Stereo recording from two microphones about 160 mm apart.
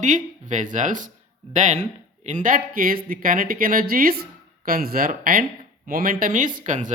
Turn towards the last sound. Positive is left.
turn(degrees=-50)  # may be behind; listen again after turning